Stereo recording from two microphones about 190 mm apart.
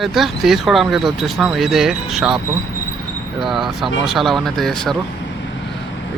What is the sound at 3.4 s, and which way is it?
Speech, centre (ahead or behind).